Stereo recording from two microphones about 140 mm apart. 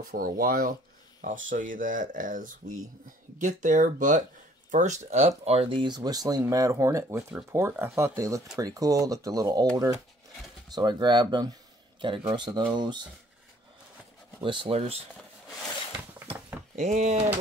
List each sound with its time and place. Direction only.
0.0 s speech: 90° right
1.2 s speech: 70° right (ahead or behind); by 9.7 s 25° right (ahead or behind)
10.7 s a man's voice: 30° right (ahead or behind)
14.4 s speech: 35° right (ahead or behind)
16.7 s speech: 55° right (ahead or behind)